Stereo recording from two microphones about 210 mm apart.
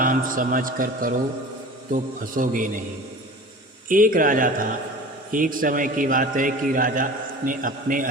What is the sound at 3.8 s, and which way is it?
A man's voice, 40° right (ahead or behind).